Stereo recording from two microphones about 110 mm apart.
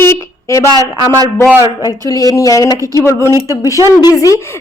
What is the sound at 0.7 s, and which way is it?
Speech, 35° right (ahead or behind).